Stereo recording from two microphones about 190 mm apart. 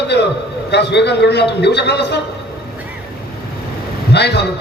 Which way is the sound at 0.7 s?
65° left (ahead or behind).